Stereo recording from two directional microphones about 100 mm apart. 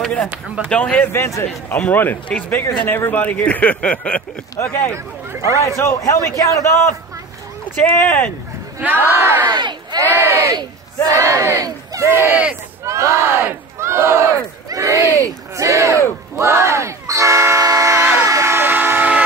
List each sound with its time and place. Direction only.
0.0 s speech: 5° left (ahead or behind)
1.1 s a man's voice: 25° left (ahead or behind); by 4.2 s 10° left (ahead or behind)
4.9 s speech: 30° right (ahead or behind)
5.8 s a man's voice: 30° left (ahead or behind)
8.7 s speech: 20° right (ahead or behind)
9.5 s speech: 50° right (ahead or behind)
10.1 s speech: 30° right (ahead or behind)
18.2 s vehicle: 30° right (ahead or behind)